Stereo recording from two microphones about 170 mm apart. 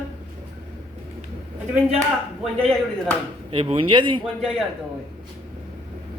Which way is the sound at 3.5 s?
30° right (ahead or behind).